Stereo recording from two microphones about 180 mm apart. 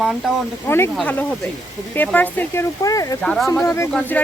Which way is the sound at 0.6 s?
15° left (ahead or behind).